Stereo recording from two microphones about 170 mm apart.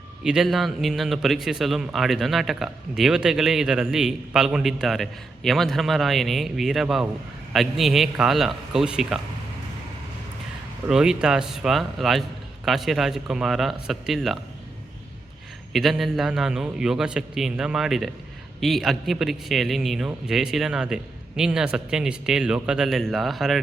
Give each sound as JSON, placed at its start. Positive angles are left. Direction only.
{"t": 0.3, "sound": "a man's voice", "side_deg": 0}
{"t": 10.8, "sound": "a man's voice", "side_deg": -5}
{"t": 15.7, "sound": "a man's voice", "side_deg": 0}